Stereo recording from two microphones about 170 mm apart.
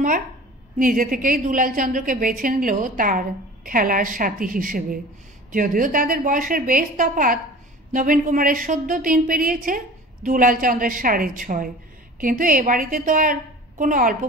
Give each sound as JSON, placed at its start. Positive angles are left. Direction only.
{"t": 0.7, "sound": "a woman's voice", "side_deg": -55}